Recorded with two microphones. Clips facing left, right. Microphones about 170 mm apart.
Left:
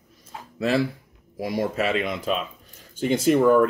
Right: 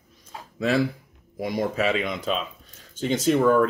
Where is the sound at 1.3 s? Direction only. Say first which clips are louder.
Even; 5° left (ahead or behind).